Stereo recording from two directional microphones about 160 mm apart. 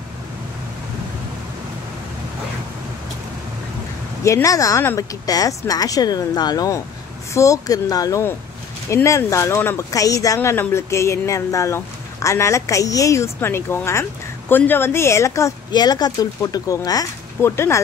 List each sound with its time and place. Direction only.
4.2 s speech: 20° left (ahead or behind)